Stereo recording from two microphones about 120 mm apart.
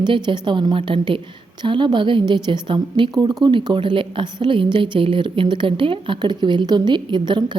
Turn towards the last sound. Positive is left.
turn(degrees=-40)  # may be behind; listen again after turning